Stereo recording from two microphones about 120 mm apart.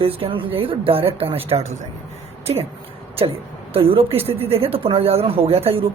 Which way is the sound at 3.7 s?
50° right (ahead or behind).